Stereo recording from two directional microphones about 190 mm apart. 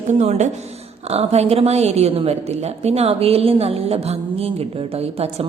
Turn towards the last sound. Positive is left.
turn(degrees=-30)  # may be behind; listen again after turning